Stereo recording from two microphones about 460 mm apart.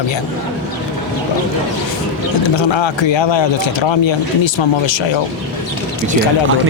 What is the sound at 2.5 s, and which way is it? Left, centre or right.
Speech, left.